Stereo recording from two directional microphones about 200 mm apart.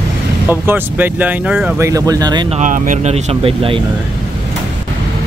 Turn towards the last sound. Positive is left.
turn(degrees=-25)  # may be behind; listen again after turning